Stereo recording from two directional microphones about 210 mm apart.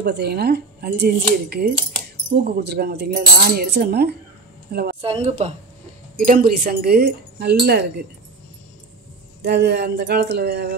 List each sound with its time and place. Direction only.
0.0 s cutlery: 50° right (ahead or behind)
5.0 s a woman's voice: 30° right (ahead or behind)
6.2 s cutlery: 45° right (ahead or behind)
9.4 s cutlery: 50° right (ahead or behind)